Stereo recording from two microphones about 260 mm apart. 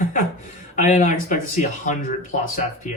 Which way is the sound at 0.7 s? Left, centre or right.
Left.